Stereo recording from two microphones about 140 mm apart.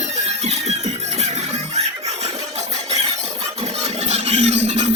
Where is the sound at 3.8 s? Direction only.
50° right (ahead or behind).